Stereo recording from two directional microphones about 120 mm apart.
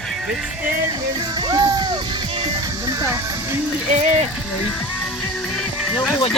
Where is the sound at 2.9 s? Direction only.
25° right (ahead or behind).